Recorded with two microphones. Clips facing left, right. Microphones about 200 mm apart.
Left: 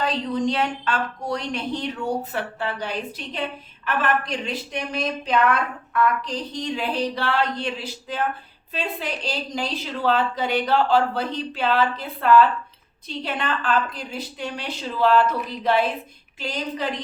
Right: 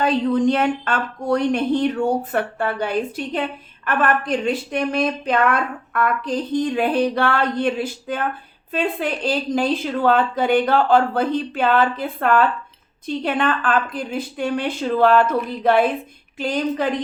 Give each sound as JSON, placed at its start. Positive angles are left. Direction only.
{"t": 0.0, "sound": "a woman's voice", "side_deg": -55}